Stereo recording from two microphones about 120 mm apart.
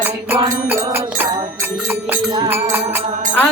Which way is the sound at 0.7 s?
15° right (ahead or behind).